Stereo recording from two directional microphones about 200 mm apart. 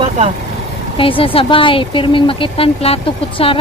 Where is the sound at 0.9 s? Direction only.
25° left (ahead or behind).